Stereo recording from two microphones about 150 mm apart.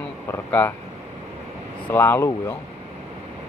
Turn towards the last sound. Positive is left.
turn(degrees=15)  # may be behind; listen again after turning